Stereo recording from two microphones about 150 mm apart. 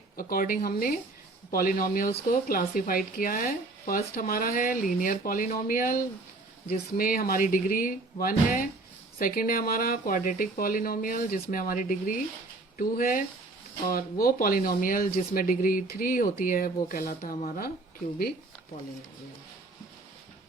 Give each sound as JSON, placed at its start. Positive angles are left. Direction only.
{"t": 0.2, "sound": "speech", "side_deg": 75}